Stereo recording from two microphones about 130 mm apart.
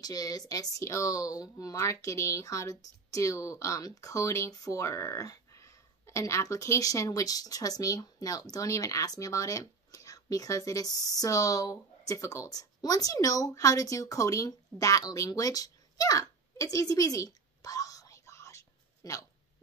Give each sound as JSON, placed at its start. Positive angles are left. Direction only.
{"t": 0.0, "sound": "speech", "side_deg": 30}